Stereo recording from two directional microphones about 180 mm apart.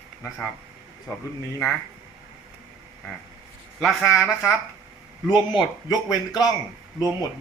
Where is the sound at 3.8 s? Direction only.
5° right (ahead or behind).